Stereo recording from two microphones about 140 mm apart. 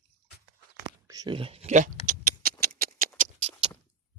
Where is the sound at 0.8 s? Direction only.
30° right (ahead or behind).